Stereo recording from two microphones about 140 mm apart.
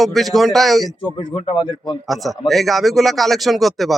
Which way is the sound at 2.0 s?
Centre (ahead or behind).